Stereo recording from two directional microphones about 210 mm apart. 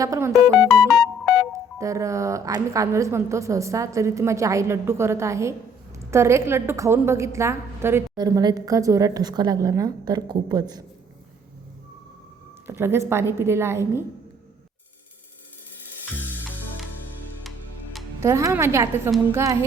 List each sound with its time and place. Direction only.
0.0 s a woman's voice: 15° right (ahead or behind)
0.5 s speech: centre (ahead or behind)
0.9 s music: centre (ahead or behind)
1.8 s a woman's voice: 15° right (ahead or behind)
12.6 s a woman's voice: 10° right (ahead or behind)
18.2 s a woman's voice: 15° right (ahead or behind)